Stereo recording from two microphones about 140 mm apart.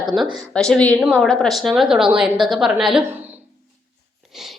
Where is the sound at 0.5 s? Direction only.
5° left (ahead or behind).